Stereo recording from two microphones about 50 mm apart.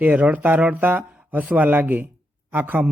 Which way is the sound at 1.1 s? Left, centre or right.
Right.